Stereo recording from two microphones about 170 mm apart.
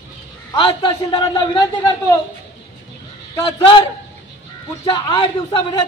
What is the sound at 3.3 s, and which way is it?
Speech, 30° left (ahead or behind).